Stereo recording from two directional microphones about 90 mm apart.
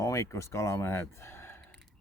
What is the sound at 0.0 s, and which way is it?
Speech, 35° left (ahead or behind).